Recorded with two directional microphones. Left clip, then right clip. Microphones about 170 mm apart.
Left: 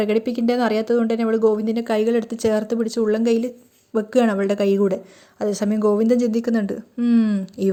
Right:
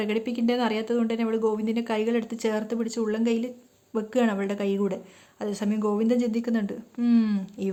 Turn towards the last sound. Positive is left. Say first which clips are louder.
# left 5 dB
turn(degrees=15)  # may be behind; listen again after turning